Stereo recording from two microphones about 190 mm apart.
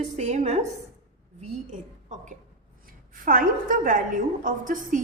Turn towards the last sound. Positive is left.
turn(degrees=-45)  # may be behind; listen again after turning